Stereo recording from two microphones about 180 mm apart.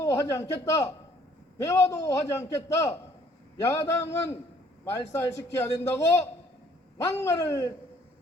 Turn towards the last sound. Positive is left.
turn(degrees=15)  # may be behind; listen again after turning